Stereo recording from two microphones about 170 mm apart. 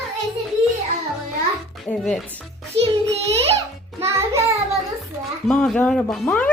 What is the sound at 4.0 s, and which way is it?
Music, 15° right (ahead or behind).